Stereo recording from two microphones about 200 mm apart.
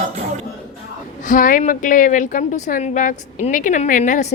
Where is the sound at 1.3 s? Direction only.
40° left (ahead or behind).